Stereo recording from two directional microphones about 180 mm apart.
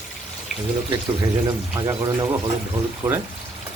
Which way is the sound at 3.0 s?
10° right (ahead or behind).